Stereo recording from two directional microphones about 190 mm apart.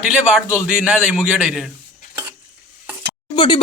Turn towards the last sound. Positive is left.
turn(degrees=25)  # may be behind; listen again after turning